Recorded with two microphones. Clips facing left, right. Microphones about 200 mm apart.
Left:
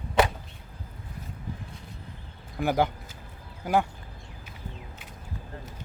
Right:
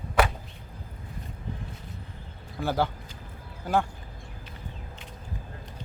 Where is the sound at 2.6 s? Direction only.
15° left (ahead or behind).